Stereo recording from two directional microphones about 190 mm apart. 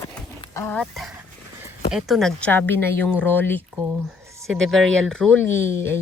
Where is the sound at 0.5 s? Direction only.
10° left (ahead or behind).